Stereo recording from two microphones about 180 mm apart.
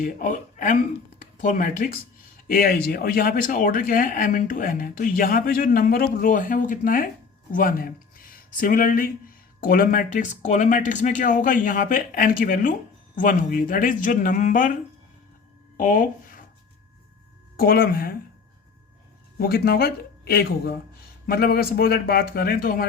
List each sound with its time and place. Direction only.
0.0 s speech: 45° left (ahead or behind)
15.8 s speech: 45° left (ahead or behind)
17.6 s a man's voice: 55° left (ahead or behind)
19.4 s a man's voice: 60° left (ahead or behind)